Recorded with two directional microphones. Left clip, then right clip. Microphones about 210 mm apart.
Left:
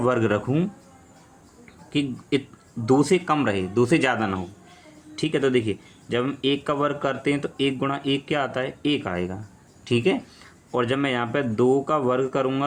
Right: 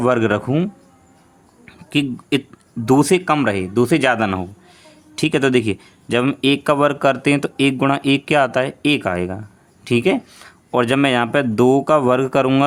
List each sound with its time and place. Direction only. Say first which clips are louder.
0.0 s speech: right 5 dB; 35° right (ahead or behind)
1.6 s a sound: right 6 dB; 40° right (ahead or behind)
2.8 s speech: right 5 dB; 40° right (ahead or behind)